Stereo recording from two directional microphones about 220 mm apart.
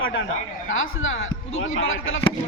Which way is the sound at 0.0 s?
60° left (ahead or behind).